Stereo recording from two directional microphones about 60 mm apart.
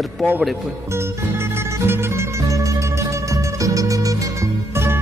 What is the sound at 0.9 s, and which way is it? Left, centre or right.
Music, right.